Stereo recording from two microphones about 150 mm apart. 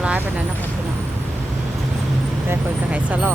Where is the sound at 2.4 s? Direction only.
10° right (ahead or behind).